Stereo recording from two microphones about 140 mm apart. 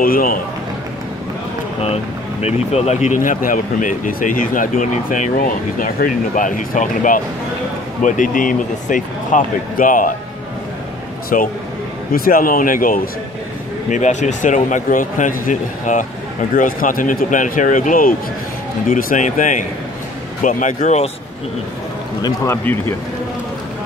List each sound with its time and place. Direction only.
0.0 s a man's voice: 90° left
2.4 s speech: 50° left (ahead or behind); by 10.1 s 75° left (ahead or behind)
11.3 s speech: 70° left (ahead or behind)
12.1 s a man's voice: 90° left
13.8 s speech: 60° left (ahead or behind)
16.5 s speech: 80° left; by 21.1 s 55° left (ahead or behind)
22.2 s a man's voice: 20° left (ahead or behind)